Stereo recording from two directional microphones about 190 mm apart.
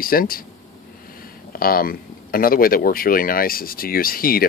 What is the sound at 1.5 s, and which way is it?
Speech, 50° left (ahead or behind).